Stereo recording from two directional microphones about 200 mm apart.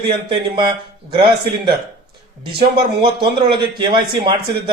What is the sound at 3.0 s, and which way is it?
A man's voice, 25° right (ahead or behind).